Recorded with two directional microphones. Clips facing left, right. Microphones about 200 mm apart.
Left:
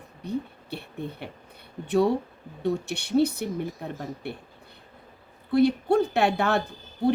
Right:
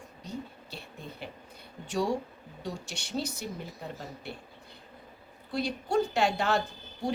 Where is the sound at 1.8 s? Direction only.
60° left (ahead or behind).